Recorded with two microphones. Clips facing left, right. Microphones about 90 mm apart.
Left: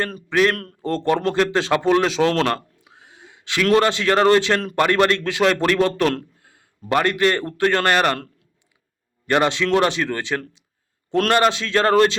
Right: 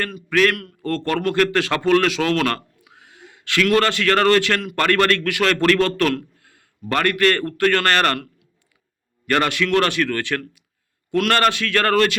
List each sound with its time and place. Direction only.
0.3 s a man's voice: 20° left (ahead or behind)
9.2 s a man's voice: 20° left (ahead or behind)